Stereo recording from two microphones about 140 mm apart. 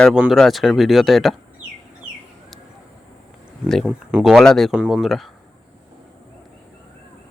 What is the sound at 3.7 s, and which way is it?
Speech, centre (ahead or behind).